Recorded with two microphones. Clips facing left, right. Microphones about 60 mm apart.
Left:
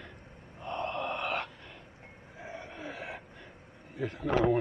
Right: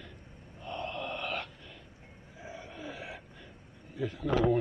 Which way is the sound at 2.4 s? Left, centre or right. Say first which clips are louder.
Left 2 dB; left.